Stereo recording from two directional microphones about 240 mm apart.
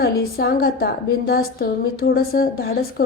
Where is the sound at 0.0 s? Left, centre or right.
Left.